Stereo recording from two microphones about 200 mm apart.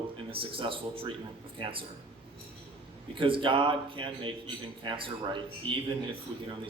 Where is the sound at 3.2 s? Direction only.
25° right (ahead or behind).